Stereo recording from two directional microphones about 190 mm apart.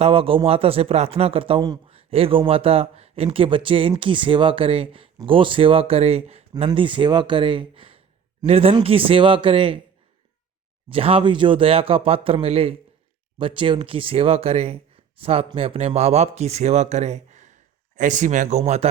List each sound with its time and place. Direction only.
0.0 s speech: 30° right (ahead or behind)
10.8 s speech: 30° right (ahead or behind)